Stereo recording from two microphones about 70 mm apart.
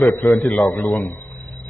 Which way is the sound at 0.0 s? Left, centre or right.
Left.